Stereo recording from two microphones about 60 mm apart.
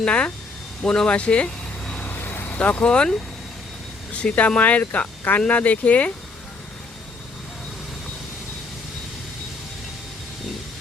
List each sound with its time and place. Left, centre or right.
0.0 s speech: centre
2.0 s vehicle: left
2.6 s speech: left